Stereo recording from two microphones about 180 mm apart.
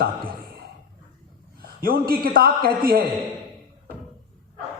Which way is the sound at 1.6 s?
55° right (ahead or behind).